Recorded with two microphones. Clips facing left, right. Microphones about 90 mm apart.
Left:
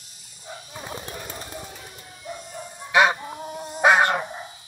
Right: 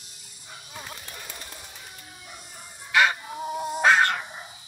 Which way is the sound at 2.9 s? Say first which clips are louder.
Left 3 dB; 20° left (ahead or behind).